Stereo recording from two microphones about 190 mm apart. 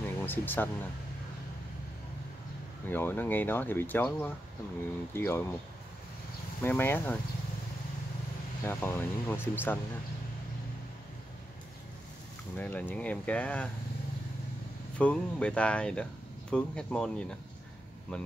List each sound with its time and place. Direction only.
0.2 s speech: 10° left (ahead or behind)
2.9 s speech: 10° left (ahead or behind)
6.6 s speech: 10° left (ahead or behind)
8.6 s speech: 10° left (ahead or behind)
12.5 s speech: 10° left (ahead or behind)
15.0 s speech: 5° left (ahead or behind)